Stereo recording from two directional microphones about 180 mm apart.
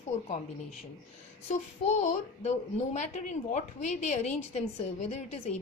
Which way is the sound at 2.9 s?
40° left (ahead or behind).